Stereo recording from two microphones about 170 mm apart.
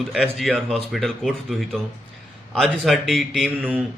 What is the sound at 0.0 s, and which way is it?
A man's voice, centre (ahead or behind).